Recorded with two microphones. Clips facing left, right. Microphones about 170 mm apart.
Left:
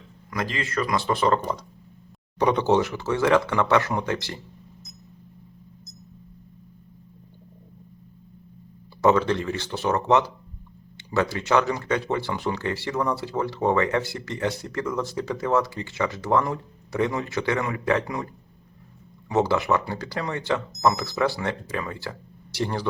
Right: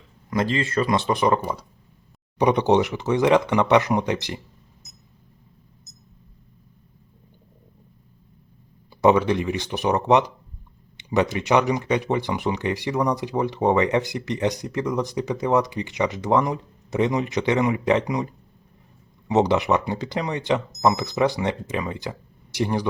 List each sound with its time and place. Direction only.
0.3 s speech: 25° right (ahead or behind)
9.0 s speech: 15° right (ahead or behind)
19.3 s speech: 20° right (ahead or behind)